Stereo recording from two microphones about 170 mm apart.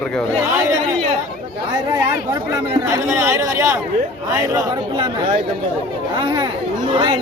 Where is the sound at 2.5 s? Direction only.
15° right (ahead or behind).